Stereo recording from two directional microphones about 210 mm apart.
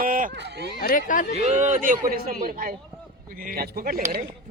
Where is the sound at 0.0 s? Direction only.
40° right (ahead or behind).